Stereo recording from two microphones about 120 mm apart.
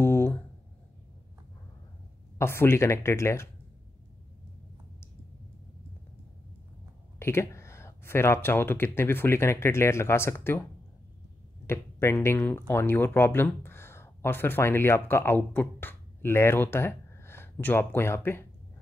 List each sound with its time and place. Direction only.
0.0 s a sound: 20° left (ahead or behind)
2.3 s speech: 20° left (ahead or behind)
7.2 s speech: 20° left (ahead or behind)
11.6 s speech: 20° left (ahead or behind)